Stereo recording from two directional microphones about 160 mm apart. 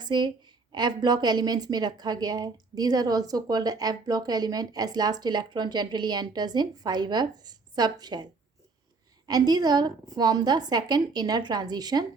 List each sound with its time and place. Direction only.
0.0 s a woman's voice: 30° right (ahead or behind)